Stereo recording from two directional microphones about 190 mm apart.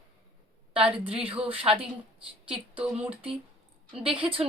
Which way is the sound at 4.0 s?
30° right (ahead or behind).